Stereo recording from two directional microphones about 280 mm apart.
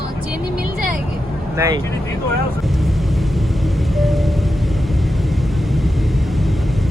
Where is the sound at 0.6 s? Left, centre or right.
Right.